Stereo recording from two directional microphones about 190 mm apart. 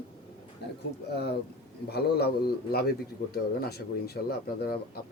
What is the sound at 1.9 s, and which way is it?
Speech, 55° left (ahead or behind).